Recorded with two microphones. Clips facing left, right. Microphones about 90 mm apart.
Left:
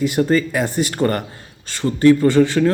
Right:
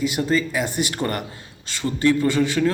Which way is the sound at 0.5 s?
35° left (ahead or behind).